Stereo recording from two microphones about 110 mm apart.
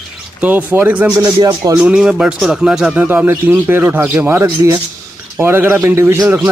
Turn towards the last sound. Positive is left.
turn(degrees=-25)  # may be behind; listen again after turning